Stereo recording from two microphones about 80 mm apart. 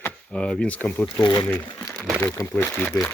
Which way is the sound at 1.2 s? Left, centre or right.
Left.